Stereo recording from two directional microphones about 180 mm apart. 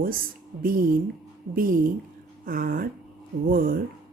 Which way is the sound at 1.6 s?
50° right (ahead or behind).